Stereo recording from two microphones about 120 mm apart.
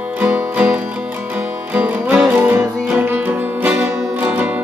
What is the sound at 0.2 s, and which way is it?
Music, 15° right (ahead or behind).